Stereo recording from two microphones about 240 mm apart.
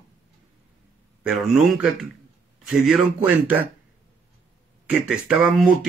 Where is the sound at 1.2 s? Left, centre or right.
Centre.